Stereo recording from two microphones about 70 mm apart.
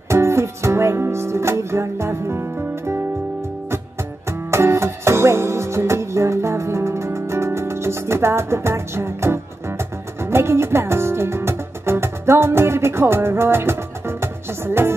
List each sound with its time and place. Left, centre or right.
0.1 s music: right
4.3 s music: right